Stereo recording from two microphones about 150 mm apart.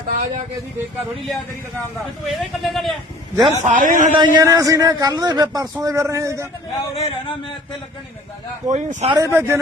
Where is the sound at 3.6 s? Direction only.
60° right (ahead or behind).